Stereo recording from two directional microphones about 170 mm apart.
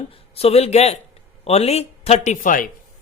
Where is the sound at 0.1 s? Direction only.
35° left (ahead or behind); by 2.6 s 50° left (ahead or behind).